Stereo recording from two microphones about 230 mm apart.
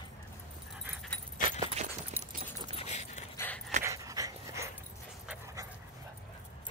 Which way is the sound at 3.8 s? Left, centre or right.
Centre.